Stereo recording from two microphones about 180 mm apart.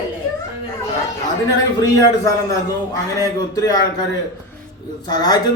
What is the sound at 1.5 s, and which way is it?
Speech, 20° left (ahead or behind).